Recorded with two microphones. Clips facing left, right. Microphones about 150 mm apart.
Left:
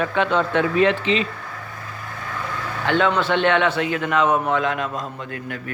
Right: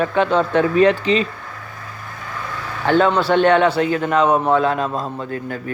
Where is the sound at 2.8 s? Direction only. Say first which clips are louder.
Right 4 dB; 40° right (ahead or behind).